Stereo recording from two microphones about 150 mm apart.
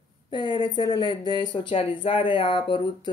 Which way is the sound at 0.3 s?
30° left (ahead or behind).